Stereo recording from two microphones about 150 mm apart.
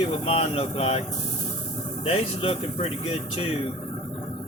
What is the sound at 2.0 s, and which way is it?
Speech, 40° left (ahead or behind).